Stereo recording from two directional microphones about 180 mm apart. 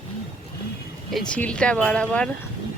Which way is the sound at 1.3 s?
5° left (ahead or behind).